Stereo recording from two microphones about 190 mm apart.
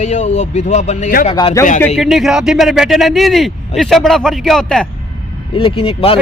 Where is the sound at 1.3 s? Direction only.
25° left (ahead or behind).